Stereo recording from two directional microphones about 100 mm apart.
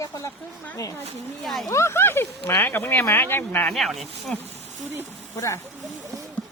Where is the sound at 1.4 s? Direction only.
Centre (ahead or behind).